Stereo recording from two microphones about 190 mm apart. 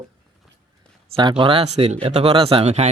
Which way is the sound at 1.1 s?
25° right (ahead or behind).